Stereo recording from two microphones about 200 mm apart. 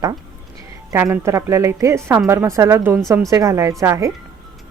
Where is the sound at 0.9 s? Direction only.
15° right (ahead or behind).